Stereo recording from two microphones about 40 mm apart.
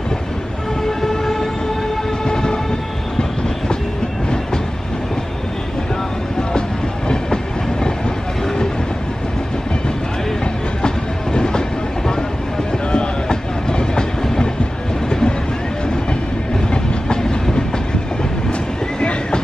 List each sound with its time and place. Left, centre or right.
0.8 s a sound: centre
2.2 s train: centre
11.3 s train: left
12.9 s train: left
16.7 s train: centre
18.5 s vehicle: left